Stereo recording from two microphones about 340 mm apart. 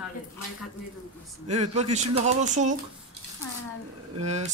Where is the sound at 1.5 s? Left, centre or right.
Centre.